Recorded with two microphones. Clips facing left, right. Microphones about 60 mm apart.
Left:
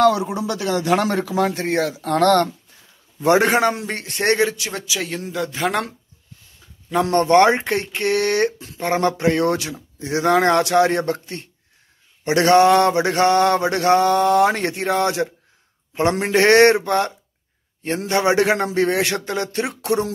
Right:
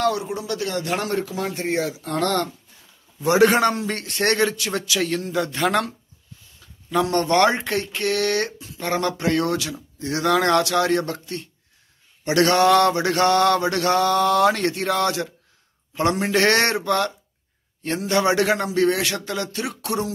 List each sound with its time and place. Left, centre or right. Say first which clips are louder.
1.4 s speech: left 4 dB; left
3.2 s a man's voice: left 2 dB; left
3.4 s mantra: even; centre
4.5 s a man's voice: right 1 dB; centre
6.9 s mantra: left 4 dB; left
18.7 s a sound: left 1 dB; left